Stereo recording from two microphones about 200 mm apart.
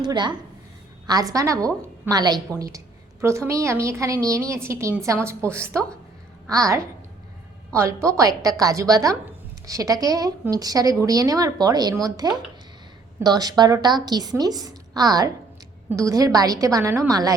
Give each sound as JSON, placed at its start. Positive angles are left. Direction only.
{"t": 0.0, "sound": "a woman's voice", "side_deg": -20}